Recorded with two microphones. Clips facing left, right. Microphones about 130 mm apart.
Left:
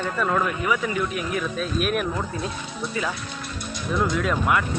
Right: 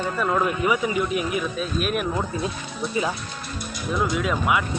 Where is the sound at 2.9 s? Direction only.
20° right (ahead or behind).